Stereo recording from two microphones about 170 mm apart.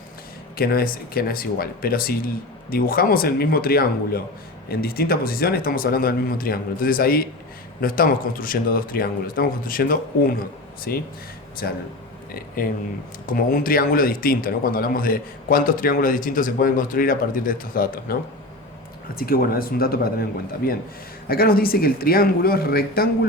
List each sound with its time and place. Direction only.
0.5 s a man's voice: 60° left (ahead or behind)
19.2 s a man's voice: 60° left (ahead or behind)